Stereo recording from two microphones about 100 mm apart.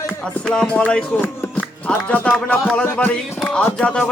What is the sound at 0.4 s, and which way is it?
Speech, 5° left (ahead or behind).